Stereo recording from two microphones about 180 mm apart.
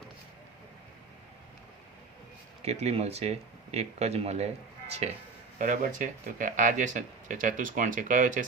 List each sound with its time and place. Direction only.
2.6 s speech: 35° right (ahead or behind)
5.5 s speech: 45° right (ahead or behind)